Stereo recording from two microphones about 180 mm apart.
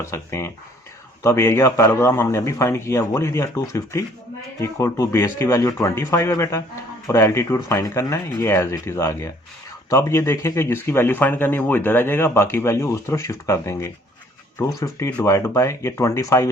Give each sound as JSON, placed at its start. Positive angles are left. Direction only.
{"t": 0.0, "sound": "speech", "side_deg": 15}